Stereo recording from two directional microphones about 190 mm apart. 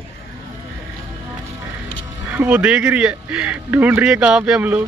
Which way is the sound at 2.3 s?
5° right (ahead or behind).